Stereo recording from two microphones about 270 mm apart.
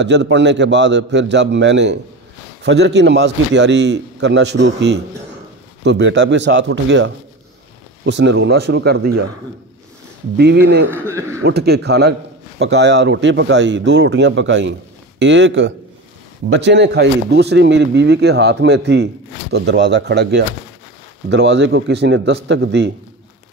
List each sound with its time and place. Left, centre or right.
0.0 s a man's voice: right
10.3 s a man's voice: right
10.9 s a man's voice: centre
11.4 s a man's voice: right